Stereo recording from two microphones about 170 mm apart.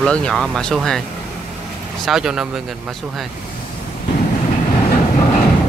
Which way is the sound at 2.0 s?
5° right (ahead or behind).